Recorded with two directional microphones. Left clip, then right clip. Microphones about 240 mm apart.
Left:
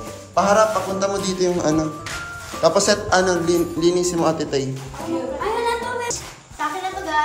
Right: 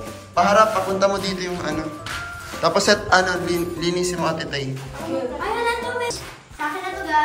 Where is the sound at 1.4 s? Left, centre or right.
Left.